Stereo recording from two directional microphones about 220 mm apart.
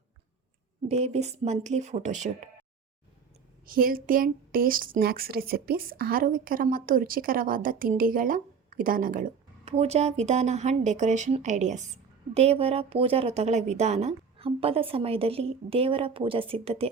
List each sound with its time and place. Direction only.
0.9 s speech: 30° right (ahead or behind)
3.7 s a woman's voice: 40° right (ahead or behind)